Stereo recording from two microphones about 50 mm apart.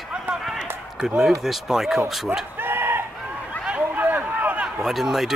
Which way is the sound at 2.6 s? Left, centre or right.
Right.